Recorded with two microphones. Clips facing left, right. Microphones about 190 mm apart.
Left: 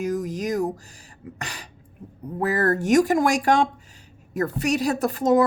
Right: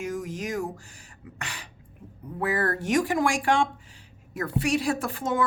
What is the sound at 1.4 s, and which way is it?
A woman's voice, 40° left (ahead or behind).